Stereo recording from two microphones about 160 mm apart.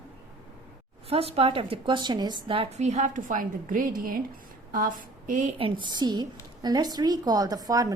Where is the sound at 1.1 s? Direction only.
35° right (ahead or behind).